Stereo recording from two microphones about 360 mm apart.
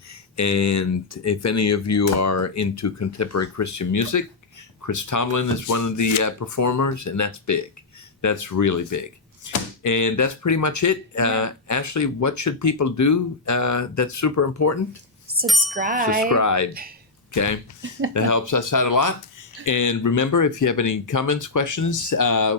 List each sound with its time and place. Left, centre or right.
0.3 s speech: left
15.3 s chime: right
15.7 s speech: right
16.3 s speech: left